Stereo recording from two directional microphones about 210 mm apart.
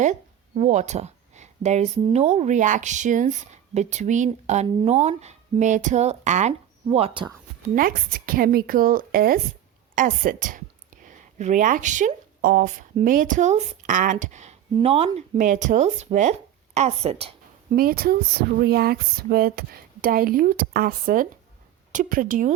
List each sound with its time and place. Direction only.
0.0 s speech: 35° right (ahead or behind)
7.8 s a woman's voice: 40° right (ahead or behind)
17.7 s speech: 45° right (ahead or behind)